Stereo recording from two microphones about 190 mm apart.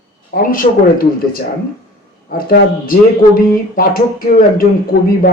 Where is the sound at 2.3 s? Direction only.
50° left (ahead or behind).